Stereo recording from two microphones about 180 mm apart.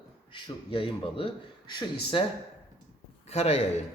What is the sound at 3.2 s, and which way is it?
Speech, 35° left (ahead or behind).